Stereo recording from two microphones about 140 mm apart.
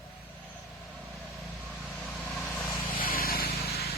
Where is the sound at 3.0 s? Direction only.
90° left.